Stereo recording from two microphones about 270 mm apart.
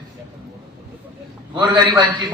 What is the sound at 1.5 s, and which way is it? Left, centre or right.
Speech, centre.